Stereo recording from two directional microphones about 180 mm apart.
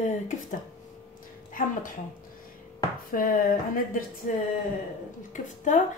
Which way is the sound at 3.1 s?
50° left (ahead or behind).